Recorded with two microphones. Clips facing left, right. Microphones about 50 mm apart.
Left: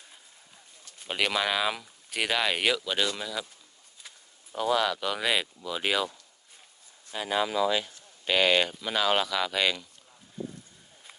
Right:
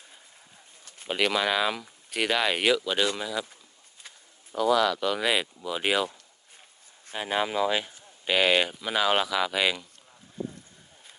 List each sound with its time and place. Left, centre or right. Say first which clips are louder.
1.0 s speech: right 2 dB; centre
4.5 s speech: right 3 dB; centre
4.9 s speech: right 2 dB; centre
7.1 s speech: even; right
8.2 s speech: right 1 dB; centre